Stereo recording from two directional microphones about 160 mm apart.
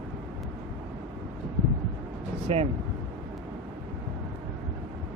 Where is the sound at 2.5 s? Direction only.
35° right (ahead or behind).